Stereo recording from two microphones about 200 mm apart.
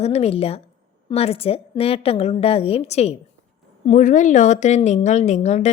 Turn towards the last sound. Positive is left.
turn(degrees=35)  # may be behind; listen again after turning